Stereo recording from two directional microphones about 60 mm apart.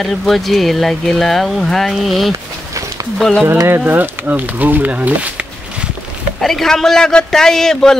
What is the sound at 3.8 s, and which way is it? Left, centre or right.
Speech, right.